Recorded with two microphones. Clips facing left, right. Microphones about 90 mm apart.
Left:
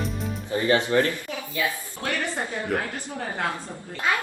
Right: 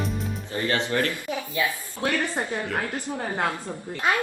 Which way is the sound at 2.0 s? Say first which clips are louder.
Right 3 dB; 20° right (ahead or behind).